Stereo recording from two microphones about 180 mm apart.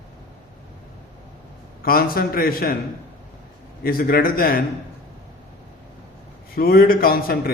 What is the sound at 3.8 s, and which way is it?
Speech, 55° left (ahead or behind).